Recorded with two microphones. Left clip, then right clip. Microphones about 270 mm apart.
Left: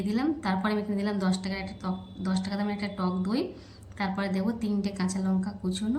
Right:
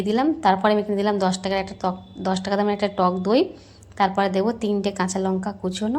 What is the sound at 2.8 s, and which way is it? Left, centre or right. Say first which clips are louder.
Speech: right 13 dB; right.